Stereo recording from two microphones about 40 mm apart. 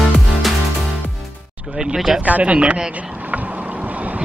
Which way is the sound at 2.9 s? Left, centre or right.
Right.